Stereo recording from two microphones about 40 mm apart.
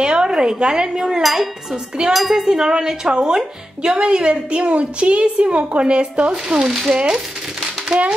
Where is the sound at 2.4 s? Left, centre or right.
Centre.